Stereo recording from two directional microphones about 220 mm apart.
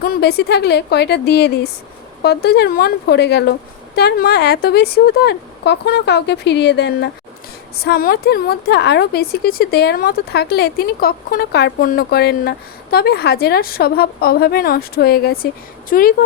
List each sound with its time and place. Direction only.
0.0 s a woman's voice: 45° left (ahead or behind)